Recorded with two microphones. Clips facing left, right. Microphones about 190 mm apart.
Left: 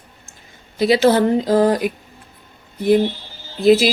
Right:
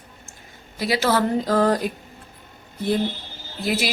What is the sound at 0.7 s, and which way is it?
Speech, 25° left (ahead or behind).